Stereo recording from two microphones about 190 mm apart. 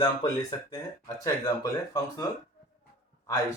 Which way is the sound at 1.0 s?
20° left (ahead or behind).